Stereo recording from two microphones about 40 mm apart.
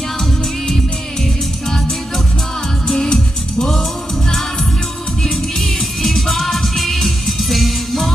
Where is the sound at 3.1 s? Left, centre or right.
Centre.